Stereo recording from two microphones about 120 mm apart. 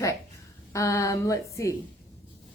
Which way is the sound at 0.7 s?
25° left (ahead or behind).